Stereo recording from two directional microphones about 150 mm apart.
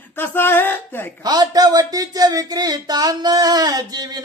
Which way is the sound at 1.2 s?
25° right (ahead or behind).